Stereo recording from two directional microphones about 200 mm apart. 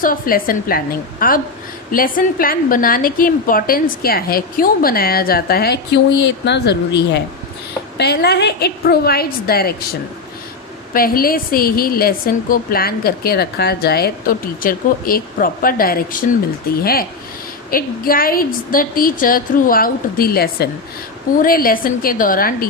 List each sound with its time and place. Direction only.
0.0 s a woman's voice: 45° left (ahead or behind)
10.9 s a woman's voice: 45° left (ahead or behind)